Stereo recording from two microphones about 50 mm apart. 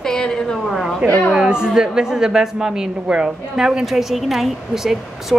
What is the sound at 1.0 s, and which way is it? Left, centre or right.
Speech, right.